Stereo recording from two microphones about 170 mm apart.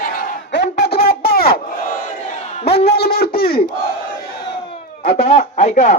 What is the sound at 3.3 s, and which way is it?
Battle cry, 65° left (ahead or behind).